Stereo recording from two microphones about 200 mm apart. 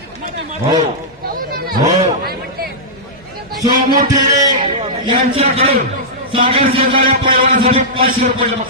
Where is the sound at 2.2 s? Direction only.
50° right (ahead or behind).